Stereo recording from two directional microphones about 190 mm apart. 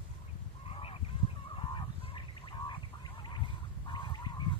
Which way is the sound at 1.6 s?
25° left (ahead or behind).